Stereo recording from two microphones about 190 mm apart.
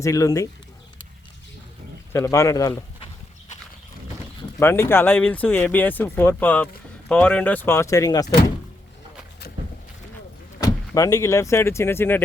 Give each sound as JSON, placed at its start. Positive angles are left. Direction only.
{"t": 0.0, "sound": "speech", "side_deg": 15}
{"t": 2.1, "sound": "speech", "side_deg": 15}
{"t": 4.6, "sound": "speech", "side_deg": 10}
{"t": 10.6, "sound": "speech", "side_deg": 20}